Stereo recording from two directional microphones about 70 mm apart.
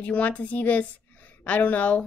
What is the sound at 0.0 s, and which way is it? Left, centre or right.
A woman's voice, left.